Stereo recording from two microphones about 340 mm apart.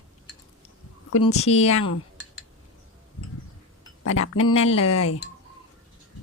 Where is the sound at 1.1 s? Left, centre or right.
Left.